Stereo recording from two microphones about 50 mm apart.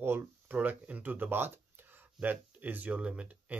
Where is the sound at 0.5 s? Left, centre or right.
Right.